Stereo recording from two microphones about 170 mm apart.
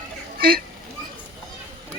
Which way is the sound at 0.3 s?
60° right (ahead or behind).